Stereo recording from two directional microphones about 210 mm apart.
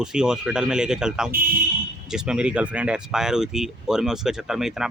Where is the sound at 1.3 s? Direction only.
45° right (ahead or behind).